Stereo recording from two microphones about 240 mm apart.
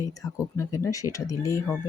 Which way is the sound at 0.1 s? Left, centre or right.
Centre.